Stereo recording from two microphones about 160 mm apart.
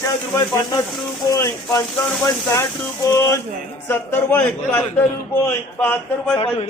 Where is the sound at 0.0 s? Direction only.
20° left (ahead or behind).